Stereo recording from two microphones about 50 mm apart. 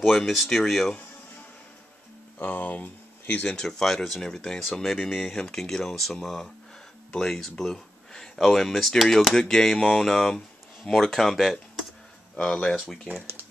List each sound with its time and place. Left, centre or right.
0.0 s speech: centre
2.3 s speech: left
3.4 s speech: centre
12.4 s speech: left